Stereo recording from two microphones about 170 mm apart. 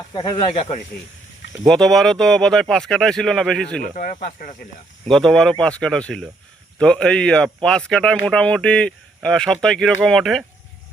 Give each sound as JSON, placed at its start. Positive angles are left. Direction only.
{"t": 0.1, "sound": "speech", "side_deg": 30}
{"t": 1.6, "sound": "speech", "side_deg": 0}
{"t": 3.8, "sound": "speech", "side_deg": 55}
{"t": 5.0, "sound": "speech", "side_deg": 5}